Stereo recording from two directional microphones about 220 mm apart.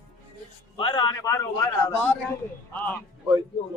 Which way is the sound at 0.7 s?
20° left (ahead or behind).